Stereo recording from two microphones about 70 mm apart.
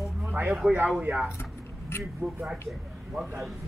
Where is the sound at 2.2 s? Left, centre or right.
Centre.